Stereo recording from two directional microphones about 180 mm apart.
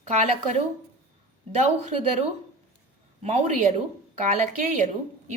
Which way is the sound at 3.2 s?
40° right (ahead or behind).